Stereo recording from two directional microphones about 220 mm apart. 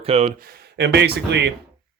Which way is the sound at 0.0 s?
25° right (ahead or behind).